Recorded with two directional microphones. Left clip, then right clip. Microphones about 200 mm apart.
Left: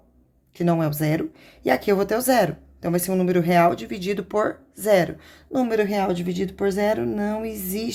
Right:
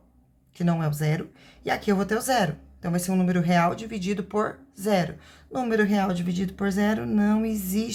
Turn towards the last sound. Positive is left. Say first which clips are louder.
# left 1 dB
turn(degrees=20)  # may be behind; listen again after turning